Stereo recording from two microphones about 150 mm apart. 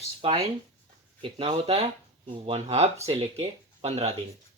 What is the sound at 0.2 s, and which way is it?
Speech, 35° right (ahead or behind).